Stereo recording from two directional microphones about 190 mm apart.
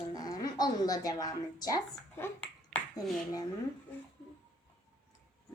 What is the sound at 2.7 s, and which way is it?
Finger snapping, 10° left (ahead or behind).